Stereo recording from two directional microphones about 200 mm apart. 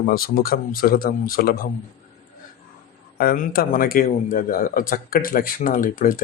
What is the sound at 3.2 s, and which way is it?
Speech, 50° left (ahead or behind).